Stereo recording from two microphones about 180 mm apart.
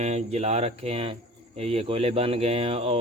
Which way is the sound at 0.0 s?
40° right (ahead or behind).